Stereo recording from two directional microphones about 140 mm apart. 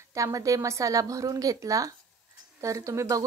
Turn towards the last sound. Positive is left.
turn(degrees=-20)  # may be behind; listen again after turning